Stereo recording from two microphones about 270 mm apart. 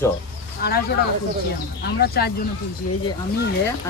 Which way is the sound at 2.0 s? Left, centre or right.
Left.